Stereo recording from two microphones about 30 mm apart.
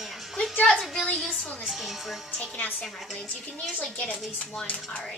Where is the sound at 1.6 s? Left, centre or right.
Centre.